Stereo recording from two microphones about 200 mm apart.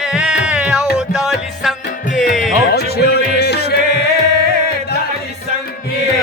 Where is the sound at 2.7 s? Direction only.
55° left (ahead or behind).